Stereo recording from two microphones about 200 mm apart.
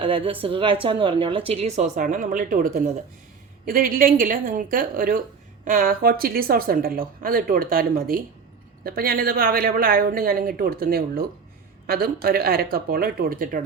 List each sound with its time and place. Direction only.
0.0 s a woman's voice: 25° right (ahead or behind); by 13.6 s 45° right (ahead or behind)